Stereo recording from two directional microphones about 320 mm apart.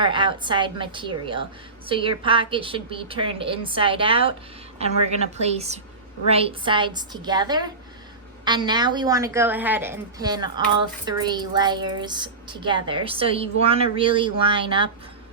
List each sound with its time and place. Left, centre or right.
0.0 s speech: centre
5.4 s a woman's voice: centre